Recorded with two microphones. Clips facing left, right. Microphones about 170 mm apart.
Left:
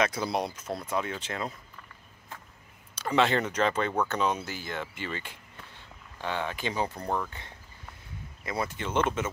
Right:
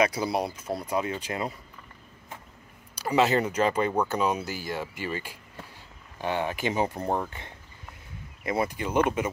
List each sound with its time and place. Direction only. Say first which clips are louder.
0.0 s speech: right 3 dB; 10° right (ahead or behind)
3.0 s speech: right 2 dB; 10° right (ahead or behind)